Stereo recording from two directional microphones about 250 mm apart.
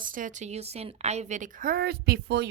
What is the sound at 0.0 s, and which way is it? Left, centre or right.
Speech, right.